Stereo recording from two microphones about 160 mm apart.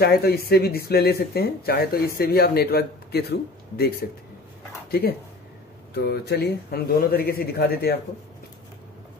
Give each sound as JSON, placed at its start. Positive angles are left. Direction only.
{"t": 0.0, "sound": "speech", "side_deg": 75}
{"t": 5.9, "sound": "speech", "side_deg": 90}